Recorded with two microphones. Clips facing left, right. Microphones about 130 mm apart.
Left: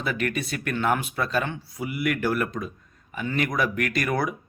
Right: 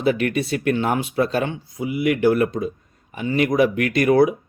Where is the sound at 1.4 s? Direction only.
20° right (ahead or behind).